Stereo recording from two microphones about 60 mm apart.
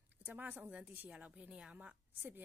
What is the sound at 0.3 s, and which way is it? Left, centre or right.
Speech, right.